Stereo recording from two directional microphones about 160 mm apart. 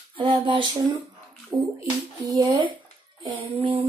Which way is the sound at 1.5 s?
10° right (ahead or behind).